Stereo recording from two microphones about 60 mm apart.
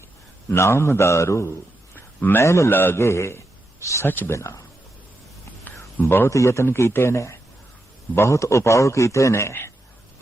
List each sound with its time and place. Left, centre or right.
0.5 s a man's voice: left
2.6 s a man's voice: left
4.0 s speech: left
4.3 s a man's voice: left
5.6 s a sound: left
6.3 s a man's voice: left